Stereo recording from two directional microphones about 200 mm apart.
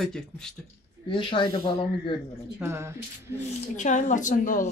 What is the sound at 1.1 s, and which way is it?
Speech, 25° left (ahead or behind).